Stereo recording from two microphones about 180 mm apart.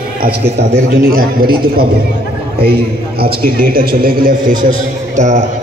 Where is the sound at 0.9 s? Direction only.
60° right (ahead or behind); by 5.4 s 40° right (ahead or behind).